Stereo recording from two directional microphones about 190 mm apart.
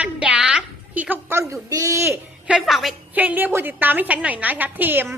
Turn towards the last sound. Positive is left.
turn(degrees=-10)  # may be behind; listen again after turning